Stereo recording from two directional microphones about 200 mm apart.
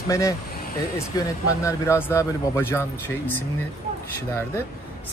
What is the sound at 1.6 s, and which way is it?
Speech, 15° left (ahead or behind).